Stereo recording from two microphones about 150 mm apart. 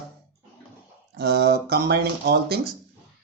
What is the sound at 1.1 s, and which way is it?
Speech, 90° right.